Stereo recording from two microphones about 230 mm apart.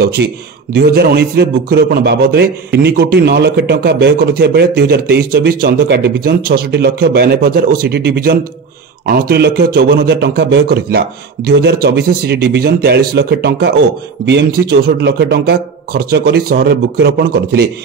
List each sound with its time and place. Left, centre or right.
0.0 s a man's voice: right